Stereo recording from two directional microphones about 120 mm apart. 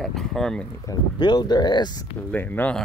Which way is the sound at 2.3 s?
10° left (ahead or behind).